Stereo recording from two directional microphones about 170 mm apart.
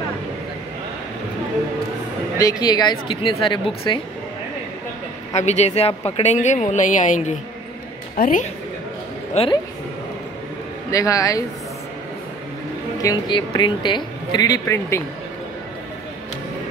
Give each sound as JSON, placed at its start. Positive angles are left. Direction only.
{"t": 2.3, "sound": "speech", "side_deg": 20}
{"t": 5.3, "sound": "speech", "side_deg": 40}
{"t": 9.4, "sound": "speech", "side_deg": 40}
{"t": 10.9, "sound": "speech", "side_deg": 20}
{"t": 13.0, "sound": "speech", "side_deg": 25}